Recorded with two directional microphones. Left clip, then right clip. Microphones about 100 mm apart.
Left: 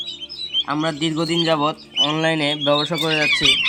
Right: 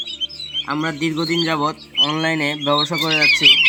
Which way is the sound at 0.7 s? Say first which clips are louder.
Even; 20° right (ahead or behind).